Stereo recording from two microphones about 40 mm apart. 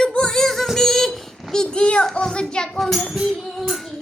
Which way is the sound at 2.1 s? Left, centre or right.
Centre.